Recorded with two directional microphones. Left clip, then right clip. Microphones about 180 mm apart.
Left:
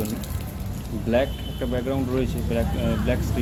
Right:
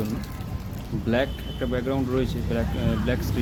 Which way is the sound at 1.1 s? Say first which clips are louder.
Left 3 dB; 20° right (ahead or behind).